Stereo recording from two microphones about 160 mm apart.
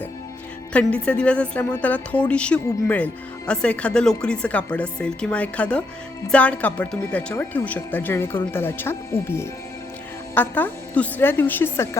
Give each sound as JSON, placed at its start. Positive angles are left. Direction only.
{"t": 0.7, "sound": "speech", "side_deg": 10}